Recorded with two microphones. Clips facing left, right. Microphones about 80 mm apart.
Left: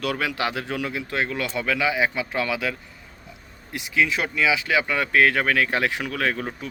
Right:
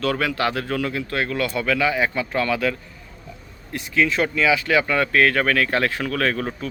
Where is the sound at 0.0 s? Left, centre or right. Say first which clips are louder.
Right 3 dB; centre.